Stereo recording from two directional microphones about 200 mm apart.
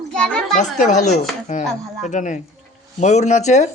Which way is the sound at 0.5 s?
35° left (ahead or behind).